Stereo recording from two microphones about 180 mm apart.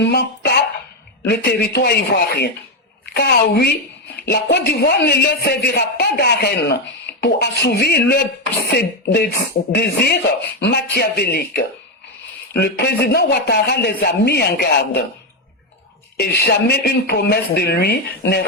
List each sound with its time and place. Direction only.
0.0 s speech: 65° left (ahead or behind)
16.1 s speech: 60° left (ahead or behind)